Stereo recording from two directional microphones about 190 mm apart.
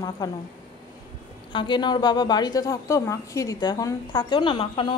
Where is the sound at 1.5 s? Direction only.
25° left (ahead or behind).